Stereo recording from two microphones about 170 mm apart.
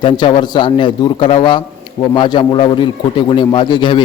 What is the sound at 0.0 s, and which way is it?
A man's voice, 30° left (ahead or behind).